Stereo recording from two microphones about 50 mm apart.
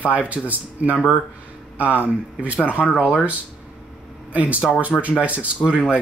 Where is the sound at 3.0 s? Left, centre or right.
Centre.